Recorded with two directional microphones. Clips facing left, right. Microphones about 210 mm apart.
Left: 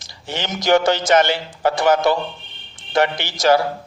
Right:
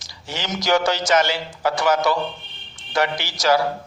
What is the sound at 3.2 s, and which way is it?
Speech, 55° left (ahead or behind).